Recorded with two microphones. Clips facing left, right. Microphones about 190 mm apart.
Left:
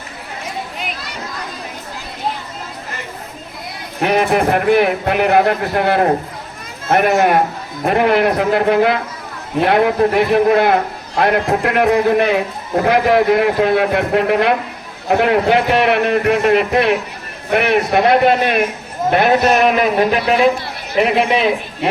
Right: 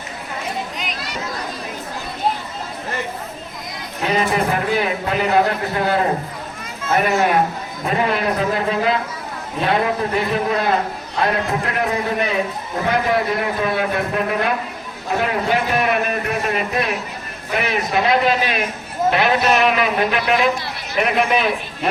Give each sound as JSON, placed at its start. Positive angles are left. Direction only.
{"t": 4.0, "sound": "a man's voice", "side_deg": 65}
{"t": 19.1, "sound": "a man's voice", "side_deg": 45}